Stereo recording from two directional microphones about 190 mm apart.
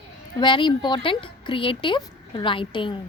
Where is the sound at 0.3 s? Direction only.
25° left (ahead or behind).